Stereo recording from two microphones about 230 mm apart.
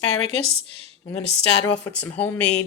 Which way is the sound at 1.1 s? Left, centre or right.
Left.